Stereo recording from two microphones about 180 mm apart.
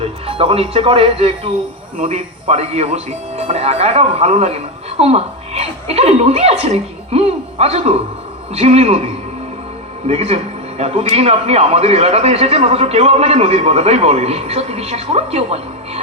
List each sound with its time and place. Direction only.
0.3 s a man's voice: 30° right (ahead or behind)
10.1 s a man's voice: 35° right (ahead or behind)